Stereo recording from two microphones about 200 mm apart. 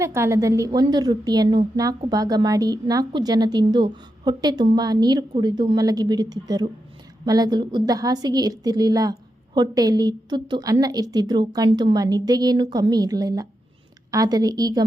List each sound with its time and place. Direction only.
0.0 s a woman's voice: 15° right (ahead or behind)